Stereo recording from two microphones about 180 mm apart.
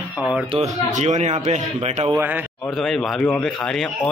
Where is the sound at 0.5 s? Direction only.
40° right (ahead or behind).